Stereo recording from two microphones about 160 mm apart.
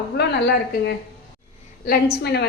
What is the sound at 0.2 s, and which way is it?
Speech, 90° left.